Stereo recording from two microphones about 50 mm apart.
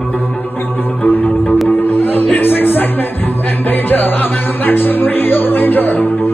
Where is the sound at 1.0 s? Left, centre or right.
Left.